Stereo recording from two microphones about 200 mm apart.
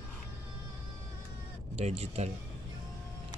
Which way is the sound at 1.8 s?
30° right (ahead or behind).